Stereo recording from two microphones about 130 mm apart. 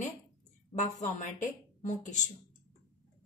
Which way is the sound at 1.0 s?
80° left.